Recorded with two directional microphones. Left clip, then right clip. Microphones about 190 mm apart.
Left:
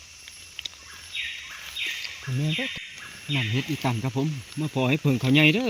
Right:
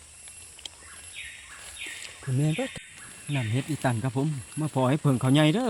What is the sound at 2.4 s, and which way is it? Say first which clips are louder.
Speech: left 2 dB; 30° right (ahead or behind).